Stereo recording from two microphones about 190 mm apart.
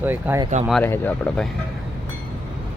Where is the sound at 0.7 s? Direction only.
10° left (ahead or behind).